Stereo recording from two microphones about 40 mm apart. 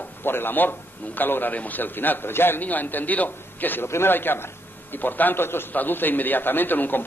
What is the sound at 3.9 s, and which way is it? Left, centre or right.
A man's voice, left.